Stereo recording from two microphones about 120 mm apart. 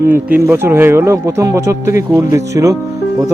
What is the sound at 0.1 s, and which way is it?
Speech, 15° right (ahead or behind).